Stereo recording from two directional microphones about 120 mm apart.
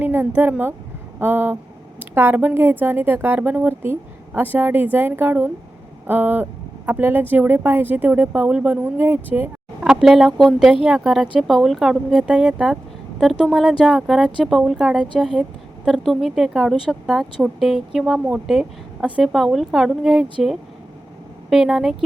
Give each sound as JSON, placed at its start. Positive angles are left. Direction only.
{"t": 0.0, "sound": "speech", "side_deg": -15}
{"t": 9.9, "sound": "a woman's voice", "side_deg": 0}
{"t": 21.5, "sound": "a woman's voice", "side_deg": -5}